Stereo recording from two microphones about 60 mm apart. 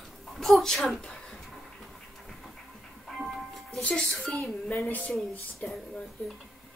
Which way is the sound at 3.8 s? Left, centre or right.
Centre.